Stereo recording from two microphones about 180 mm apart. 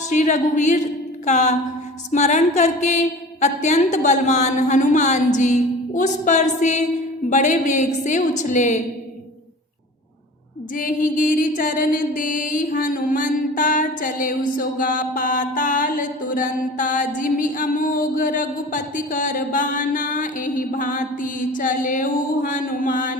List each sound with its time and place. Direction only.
0.1 s a woman's voice: 40° left (ahead or behind)
7.3 s mantra: 45° left (ahead or behind)
10.8 s mantra: 50° left (ahead or behind)